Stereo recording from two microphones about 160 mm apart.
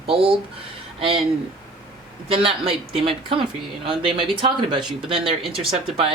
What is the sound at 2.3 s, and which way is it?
Speech, 35° right (ahead or behind).